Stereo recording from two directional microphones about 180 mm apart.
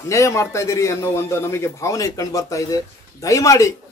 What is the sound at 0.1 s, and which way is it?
A man's voice, 15° left (ahead or behind).